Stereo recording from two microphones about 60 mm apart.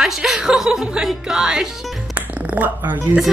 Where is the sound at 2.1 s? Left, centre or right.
Right.